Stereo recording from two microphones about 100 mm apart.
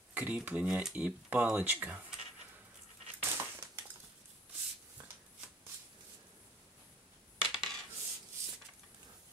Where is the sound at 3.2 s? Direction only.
20° right (ahead or behind).